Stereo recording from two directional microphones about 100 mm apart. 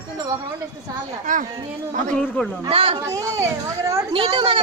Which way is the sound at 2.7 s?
70° right (ahead or behind).